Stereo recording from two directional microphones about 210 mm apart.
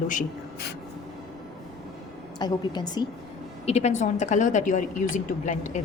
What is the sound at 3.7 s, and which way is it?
Speech, 30° left (ahead or behind).